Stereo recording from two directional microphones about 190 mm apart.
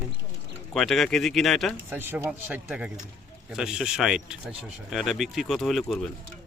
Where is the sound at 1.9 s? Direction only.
10° right (ahead or behind).